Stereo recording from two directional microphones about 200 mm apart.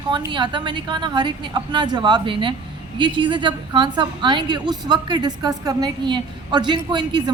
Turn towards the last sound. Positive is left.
turn(degrees=-20)  # may be behind; listen again after turning